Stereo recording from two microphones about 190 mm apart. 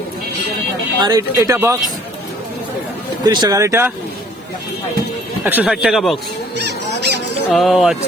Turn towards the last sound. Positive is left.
turn(degrees=0)  # may be behind; listen again after turning